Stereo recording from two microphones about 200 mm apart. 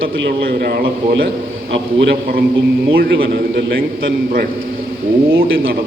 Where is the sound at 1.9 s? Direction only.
60° right (ahead or behind).